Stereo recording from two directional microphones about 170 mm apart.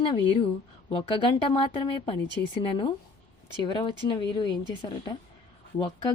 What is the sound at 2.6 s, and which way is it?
Speech, 30° left (ahead or behind).